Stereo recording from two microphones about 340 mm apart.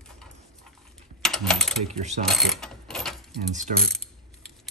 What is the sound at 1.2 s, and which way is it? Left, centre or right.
Ratchet, centre.